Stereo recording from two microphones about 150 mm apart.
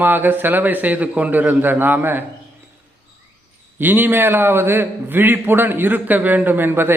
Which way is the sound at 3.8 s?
15° right (ahead or behind).